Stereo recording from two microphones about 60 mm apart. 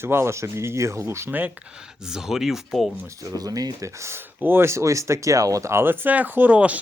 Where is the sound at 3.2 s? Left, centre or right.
Right.